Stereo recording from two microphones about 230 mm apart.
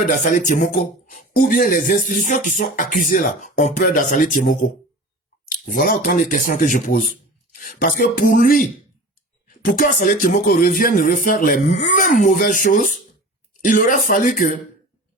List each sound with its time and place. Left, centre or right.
0.0 s speech: left
9.7 s speech: left